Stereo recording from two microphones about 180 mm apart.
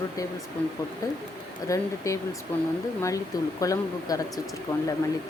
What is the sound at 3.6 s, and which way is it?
Speech, 20° left (ahead or behind).